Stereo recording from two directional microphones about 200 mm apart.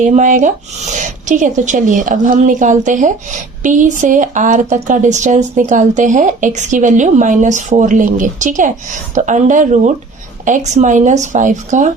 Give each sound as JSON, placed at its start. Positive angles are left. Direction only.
{"t": 0.0, "sound": "speech", "side_deg": -40}